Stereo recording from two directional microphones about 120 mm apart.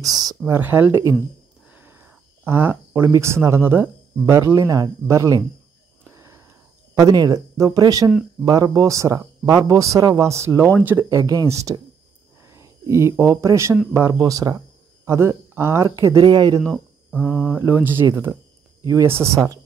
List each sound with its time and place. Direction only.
0.0 s speech: 30° right (ahead or behind)
0.5 s speech: 15° right (ahead or behind)
6.1 s a sound: 20° right (ahead or behind)
7.0 s speech: 30° right (ahead or behind)
16.2 s speech: 35° right (ahead or behind)
17.3 s speech: 10° left (ahead or behind)
17.6 s speech: 15° right (ahead or behind)